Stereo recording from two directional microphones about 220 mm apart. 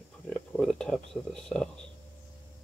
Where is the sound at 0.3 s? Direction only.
5° left (ahead or behind).